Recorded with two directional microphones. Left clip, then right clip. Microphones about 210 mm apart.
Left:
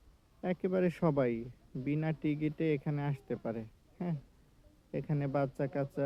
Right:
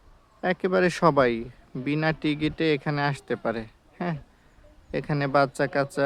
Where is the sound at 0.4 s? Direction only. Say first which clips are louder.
Right 10 dB; 20° right (ahead or behind).